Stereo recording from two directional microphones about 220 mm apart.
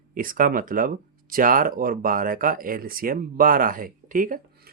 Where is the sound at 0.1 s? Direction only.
40° right (ahead or behind).